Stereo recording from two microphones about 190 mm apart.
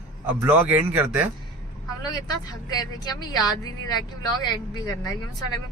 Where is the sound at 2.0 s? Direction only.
20° left (ahead or behind).